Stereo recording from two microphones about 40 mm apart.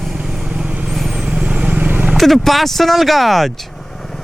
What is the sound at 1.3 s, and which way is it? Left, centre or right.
Vehicle, right.